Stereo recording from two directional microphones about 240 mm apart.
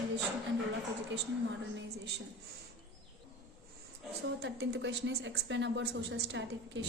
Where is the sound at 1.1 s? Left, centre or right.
Right.